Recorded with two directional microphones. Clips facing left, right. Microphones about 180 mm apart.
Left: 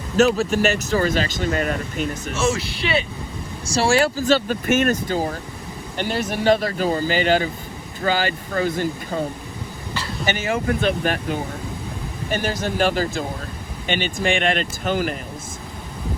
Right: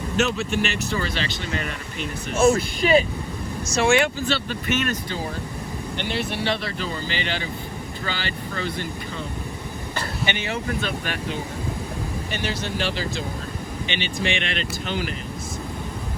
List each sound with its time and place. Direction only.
0.2 s speech: 40° left (ahead or behind)
2.5 s speech: 40° right (ahead or behind)
3.7 s speech: 35° left (ahead or behind)
10.2 s speech: 45° left (ahead or behind)